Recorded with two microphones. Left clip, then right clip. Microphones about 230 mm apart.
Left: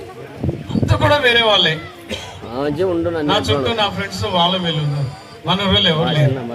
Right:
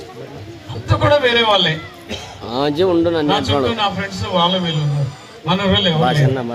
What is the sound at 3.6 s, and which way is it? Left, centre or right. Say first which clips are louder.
A man's voice: even; left.